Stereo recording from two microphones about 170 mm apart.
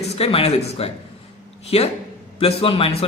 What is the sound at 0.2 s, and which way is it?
A man's voice, 35° left (ahead or behind).